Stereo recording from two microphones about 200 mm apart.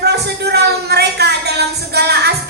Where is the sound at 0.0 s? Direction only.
55° right (ahead or behind).